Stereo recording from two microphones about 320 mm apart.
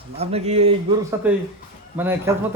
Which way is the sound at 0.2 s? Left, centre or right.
Centre.